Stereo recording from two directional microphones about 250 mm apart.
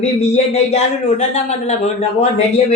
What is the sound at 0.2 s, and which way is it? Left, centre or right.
Speech, left.